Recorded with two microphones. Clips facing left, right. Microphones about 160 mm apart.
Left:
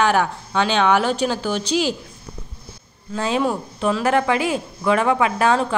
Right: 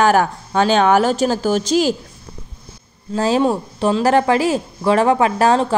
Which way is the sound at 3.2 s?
35° right (ahead or behind).